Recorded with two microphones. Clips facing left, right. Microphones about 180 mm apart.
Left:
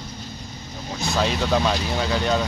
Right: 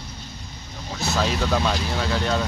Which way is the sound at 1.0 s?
Centre (ahead or behind).